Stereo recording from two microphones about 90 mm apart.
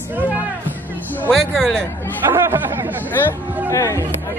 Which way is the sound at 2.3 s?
25° right (ahead or behind).